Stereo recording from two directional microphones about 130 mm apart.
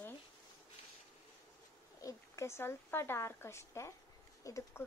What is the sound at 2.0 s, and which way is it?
Speech, 25° left (ahead or behind).